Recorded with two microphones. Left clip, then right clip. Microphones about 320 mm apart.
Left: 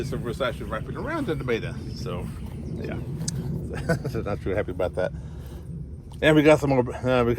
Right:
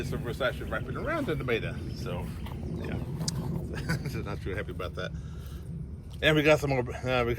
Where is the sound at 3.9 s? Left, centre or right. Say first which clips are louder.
Left 10 dB; centre.